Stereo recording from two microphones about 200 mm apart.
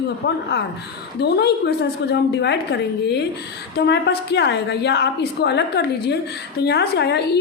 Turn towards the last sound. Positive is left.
turn(degrees=55)  # may be behind; listen again after turning